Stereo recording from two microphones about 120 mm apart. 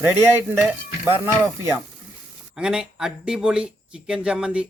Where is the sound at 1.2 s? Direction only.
20° right (ahead or behind).